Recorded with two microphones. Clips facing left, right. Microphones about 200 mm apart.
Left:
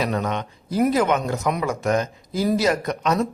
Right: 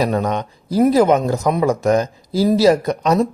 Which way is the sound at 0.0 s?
40° right (ahead or behind).